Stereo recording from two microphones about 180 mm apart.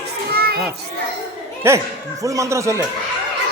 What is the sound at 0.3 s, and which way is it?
Children playing, 60° right (ahead or behind).